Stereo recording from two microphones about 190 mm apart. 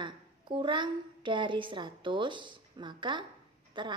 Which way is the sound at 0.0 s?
25° right (ahead or behind).